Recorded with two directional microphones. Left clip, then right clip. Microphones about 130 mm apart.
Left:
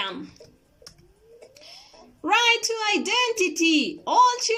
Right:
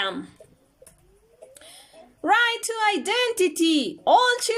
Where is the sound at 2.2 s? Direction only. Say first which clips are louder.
Even; 45° right (ahead or behind).